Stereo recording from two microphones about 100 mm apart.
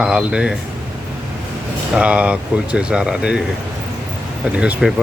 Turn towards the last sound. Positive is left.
turn(degrees=-5)  # may be behind; listen again after turning